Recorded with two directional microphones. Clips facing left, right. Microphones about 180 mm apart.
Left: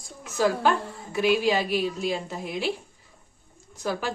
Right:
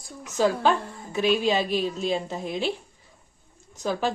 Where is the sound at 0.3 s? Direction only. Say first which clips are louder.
Right 1 dB; 20° right (ahead or behind).